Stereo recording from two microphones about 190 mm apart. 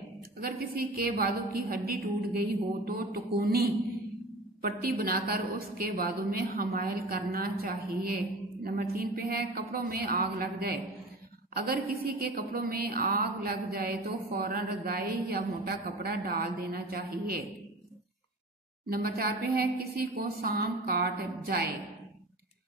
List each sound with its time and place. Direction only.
0.4 s a woman's voice: 50° right (ahead or behind)
18.9 s a woman's voice: 55° right (ahead or behind)